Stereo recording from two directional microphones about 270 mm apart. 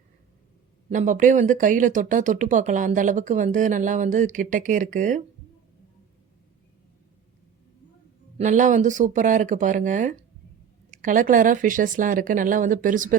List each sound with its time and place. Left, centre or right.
0.9 s speech: right
8.4 s speech: right